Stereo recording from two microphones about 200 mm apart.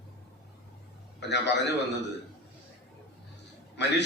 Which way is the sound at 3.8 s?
60° left (ahead or behind).